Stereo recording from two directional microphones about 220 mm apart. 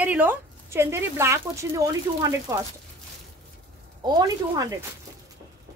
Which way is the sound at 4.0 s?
20° right (ahead or behind).